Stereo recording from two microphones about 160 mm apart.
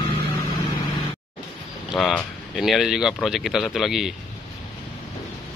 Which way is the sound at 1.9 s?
Centre (ahead or behind).